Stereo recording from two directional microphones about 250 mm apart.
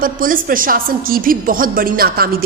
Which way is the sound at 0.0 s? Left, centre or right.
Right.